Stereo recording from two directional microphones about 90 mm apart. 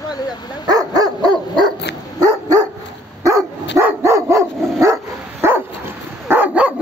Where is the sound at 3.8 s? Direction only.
30° right (ahead or behind).